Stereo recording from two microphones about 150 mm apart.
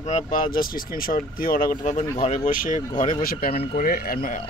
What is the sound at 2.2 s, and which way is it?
Speech, 55° left (ahead or behind).